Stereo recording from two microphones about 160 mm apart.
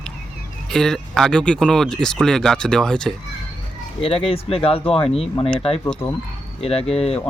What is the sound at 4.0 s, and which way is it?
Speech, 35° left (ahead or behind).